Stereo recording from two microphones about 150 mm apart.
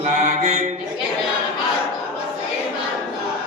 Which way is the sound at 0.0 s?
50° right (ahead or behind).